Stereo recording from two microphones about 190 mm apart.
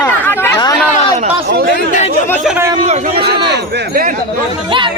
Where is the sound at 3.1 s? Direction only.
55° right (ahead or behind).